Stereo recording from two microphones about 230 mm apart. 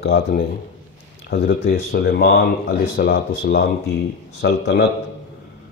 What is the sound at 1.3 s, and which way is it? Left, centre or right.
Speech, left.